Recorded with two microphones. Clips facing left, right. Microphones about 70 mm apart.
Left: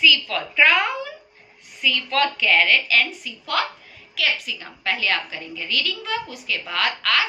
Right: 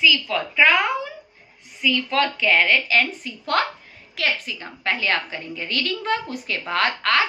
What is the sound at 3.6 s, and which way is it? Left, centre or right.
A woman's voice, right.